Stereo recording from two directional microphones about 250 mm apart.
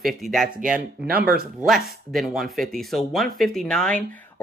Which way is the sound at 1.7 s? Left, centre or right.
Centre.